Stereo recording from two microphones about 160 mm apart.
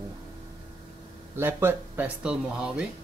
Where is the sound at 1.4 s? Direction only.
15° right (ahead or behind).